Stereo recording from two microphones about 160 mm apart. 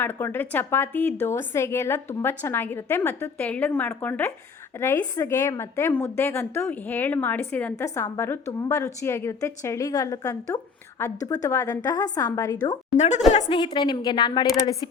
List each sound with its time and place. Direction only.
0.0 s a woman's voice: 15° left (ahead or behind)